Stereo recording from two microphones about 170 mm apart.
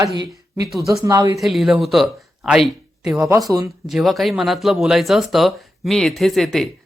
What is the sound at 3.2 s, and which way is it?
Speech, 15° right (ahead or behind).